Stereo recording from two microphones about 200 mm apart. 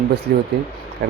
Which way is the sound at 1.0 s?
50° right (ahead or behind).